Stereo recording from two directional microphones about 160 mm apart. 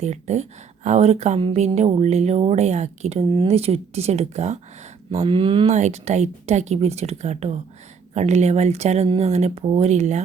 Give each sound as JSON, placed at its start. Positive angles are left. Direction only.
{"t": 0.0, "sound": "speech", "side_deg": -45}
{"t": 5.7, "sound": "speech", "side_deg": -45}